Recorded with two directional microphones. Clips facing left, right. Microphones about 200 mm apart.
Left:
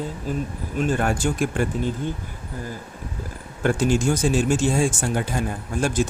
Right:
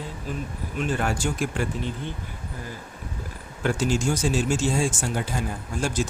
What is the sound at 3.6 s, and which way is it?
Speech, 55° left (ahead or behind).